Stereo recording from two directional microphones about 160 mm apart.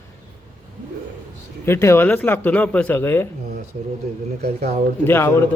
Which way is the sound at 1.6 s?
15° left (ahead or behind).